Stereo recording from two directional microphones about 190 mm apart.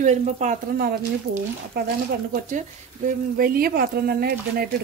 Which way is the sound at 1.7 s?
55° right (ahead or behind).